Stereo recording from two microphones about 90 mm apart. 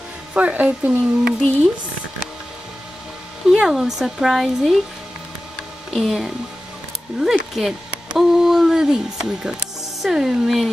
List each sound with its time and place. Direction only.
0.3 s speech: 15° right (ahead or behind)
3.4 s speech: 5° right (ahead or behind)
5.9 s speech: 5° right (ahead or behind)